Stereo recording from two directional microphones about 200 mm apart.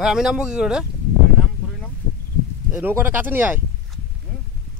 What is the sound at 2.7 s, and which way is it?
Speech, 10° right (ahead or behind).